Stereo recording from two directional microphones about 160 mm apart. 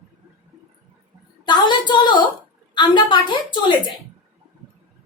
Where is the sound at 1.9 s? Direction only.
30° left (ahead or behind).